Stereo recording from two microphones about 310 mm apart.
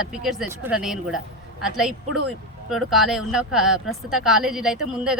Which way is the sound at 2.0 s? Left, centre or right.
Right.